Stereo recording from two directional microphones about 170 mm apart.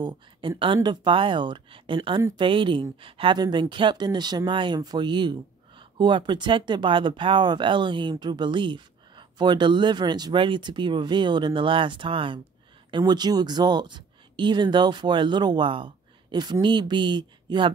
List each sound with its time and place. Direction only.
0.0 s speech: 30° right (ahead or behind)